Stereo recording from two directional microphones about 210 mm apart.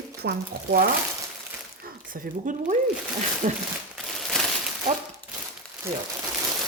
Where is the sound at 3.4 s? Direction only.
35° right (ahead or behind).